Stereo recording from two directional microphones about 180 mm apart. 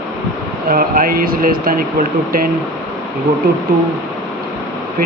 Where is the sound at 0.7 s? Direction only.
50° right (ahead or behind).